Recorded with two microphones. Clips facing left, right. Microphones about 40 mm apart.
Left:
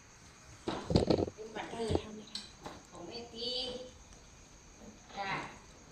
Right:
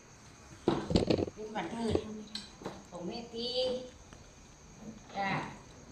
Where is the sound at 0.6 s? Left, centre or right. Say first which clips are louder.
Right 8 dB; centre.